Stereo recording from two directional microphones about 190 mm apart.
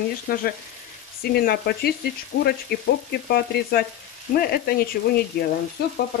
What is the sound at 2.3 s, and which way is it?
Frying, 65° left (ahead or behind).